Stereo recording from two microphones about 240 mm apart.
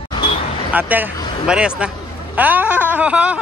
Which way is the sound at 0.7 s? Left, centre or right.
Centre.